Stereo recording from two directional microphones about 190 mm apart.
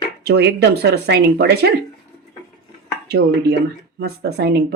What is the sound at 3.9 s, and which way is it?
Speech, 60° right (ahead or behind).